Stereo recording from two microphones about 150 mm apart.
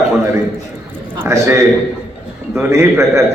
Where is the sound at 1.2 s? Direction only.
20° right (ahead or behind).